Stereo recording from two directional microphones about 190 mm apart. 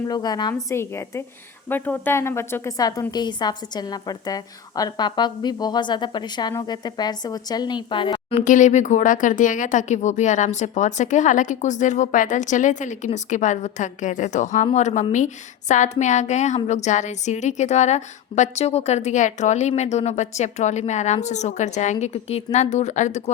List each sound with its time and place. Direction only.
0.1 s a woman's voice: 20° left (ahead or behind)
8.4 s a woman's voice: 40° left (ahead or behind)